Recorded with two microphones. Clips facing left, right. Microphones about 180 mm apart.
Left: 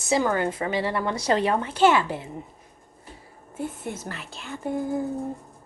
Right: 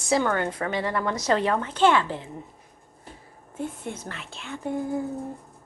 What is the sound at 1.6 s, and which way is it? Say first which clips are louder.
Speech: left 1 dB; 10° left (ahead or behind).